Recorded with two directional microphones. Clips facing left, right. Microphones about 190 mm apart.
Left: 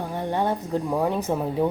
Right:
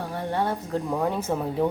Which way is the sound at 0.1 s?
15° left (ahead or behind).